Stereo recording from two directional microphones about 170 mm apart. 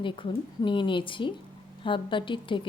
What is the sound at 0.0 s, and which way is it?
A woman's voice, 30° left (ahead or behind).